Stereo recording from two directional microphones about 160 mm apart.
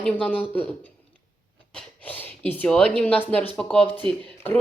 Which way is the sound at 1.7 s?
10° left (ahead or behind).